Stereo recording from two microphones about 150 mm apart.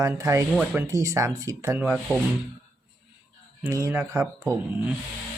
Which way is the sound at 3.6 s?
20° right (ahead or behind).